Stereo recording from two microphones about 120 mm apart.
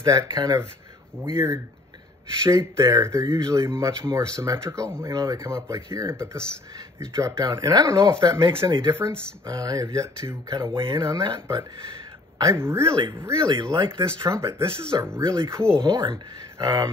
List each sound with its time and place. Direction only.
0.0 s speech: 30° right (ahead or behind)
11.0 s speech: 30° right (ahead or behind)
13.5 s speech: 35° right (ahead or behind)
14.0 s speech: 25° right (ahead or behind)
14.9 s speech: 35° right (ahead or behind)
15.8 s speech: 40° right (ahead or behind)